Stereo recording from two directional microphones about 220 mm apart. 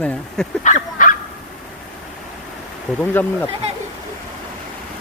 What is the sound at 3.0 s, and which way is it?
Speech, 10° left (ahead or behind).